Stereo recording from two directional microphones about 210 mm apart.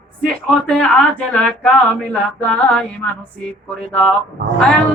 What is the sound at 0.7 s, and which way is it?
Speech, 5° left (ahead or behind).